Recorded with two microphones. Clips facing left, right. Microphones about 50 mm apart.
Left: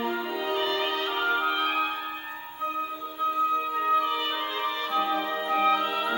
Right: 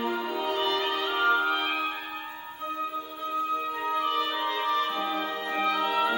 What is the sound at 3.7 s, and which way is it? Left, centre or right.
Music, centre.